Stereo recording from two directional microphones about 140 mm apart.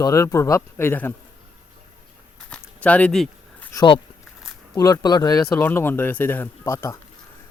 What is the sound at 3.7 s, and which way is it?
Speech, 30° left (ahead or behind).